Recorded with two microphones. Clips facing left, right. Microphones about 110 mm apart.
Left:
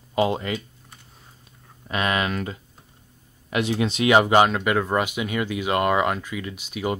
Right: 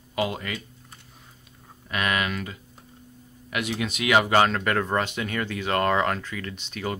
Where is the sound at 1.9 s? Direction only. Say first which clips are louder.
Left 3 dB; 30° left (ahead or behind).